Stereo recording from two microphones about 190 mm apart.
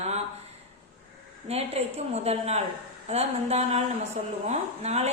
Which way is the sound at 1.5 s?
35° right (ahead or behind).